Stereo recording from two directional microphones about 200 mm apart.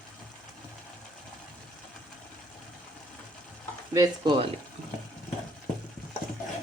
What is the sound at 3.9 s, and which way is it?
Speech, 20° right (ahead or behind).